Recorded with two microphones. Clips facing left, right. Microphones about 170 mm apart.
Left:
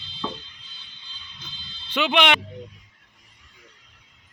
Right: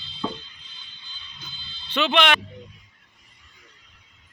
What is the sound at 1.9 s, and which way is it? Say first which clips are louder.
Speech: even; 10° left (ahead or behind).